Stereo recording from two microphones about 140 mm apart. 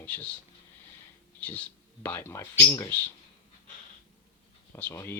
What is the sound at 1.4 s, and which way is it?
Speech, 10° left (ahead or behind).